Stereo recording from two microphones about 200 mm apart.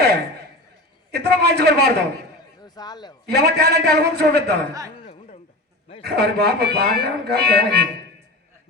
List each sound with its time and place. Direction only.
1.1 s speech: 55° right (ahead or behind)
2.6 s speech: 20° left (ahead or behind)
3.2 s speech: 55° right (ahead or behind)
4.9 s a sound: 30° left (ahead or behind)
6.0 s speech: 55° right (ahead or behind)